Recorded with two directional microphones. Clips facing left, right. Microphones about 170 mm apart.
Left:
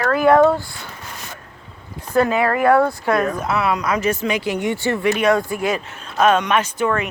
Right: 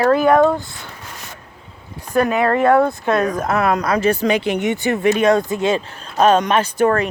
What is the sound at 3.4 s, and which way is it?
Speech, 45° right (ahead or behind).